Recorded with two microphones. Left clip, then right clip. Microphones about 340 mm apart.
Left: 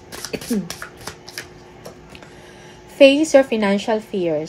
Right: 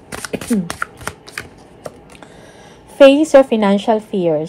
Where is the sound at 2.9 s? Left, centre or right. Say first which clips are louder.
Right 4 dB; right.